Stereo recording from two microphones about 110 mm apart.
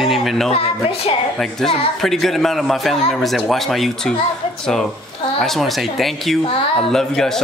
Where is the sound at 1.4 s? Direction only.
5° left (ahead or behind).